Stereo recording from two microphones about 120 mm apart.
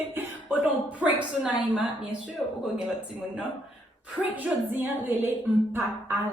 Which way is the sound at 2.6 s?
5° right (ahead or behind).